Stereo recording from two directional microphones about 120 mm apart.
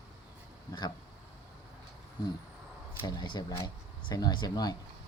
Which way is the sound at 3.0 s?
40° left (ahead or behind).